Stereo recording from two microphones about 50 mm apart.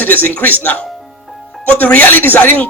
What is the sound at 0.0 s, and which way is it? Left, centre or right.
Speech, left.